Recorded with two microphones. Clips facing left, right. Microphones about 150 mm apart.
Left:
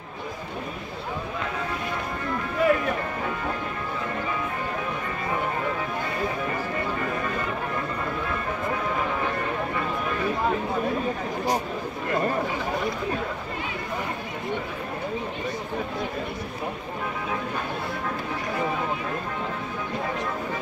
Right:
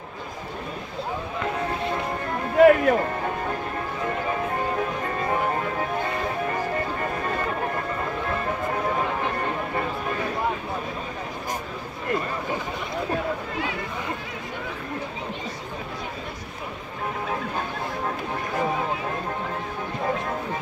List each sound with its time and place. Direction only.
2.5 s music: 60° right (ahead or behind)